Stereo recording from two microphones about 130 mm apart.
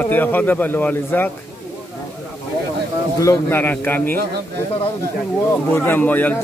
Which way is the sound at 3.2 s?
20° left (ahead or behind).